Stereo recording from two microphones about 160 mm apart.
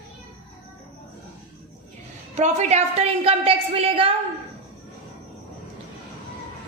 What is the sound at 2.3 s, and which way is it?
A woman's voice, 45° right (ahead or behind).